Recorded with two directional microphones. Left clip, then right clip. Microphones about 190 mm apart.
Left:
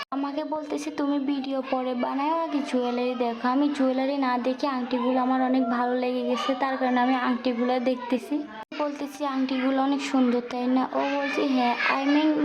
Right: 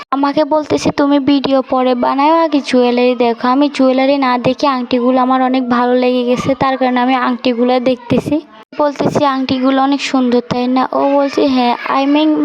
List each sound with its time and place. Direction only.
0.2 s speech: 50° right (ahead or behind)